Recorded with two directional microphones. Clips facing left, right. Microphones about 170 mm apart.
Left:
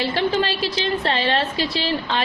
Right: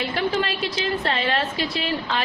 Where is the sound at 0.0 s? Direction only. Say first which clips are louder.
Left 3 dB; 30° left (ahead or behind).